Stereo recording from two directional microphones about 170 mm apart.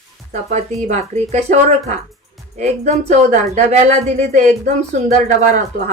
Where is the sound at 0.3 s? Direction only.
45° right (ahead or behind).